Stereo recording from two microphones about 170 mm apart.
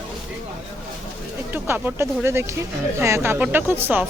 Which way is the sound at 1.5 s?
15° right (ahead or behind).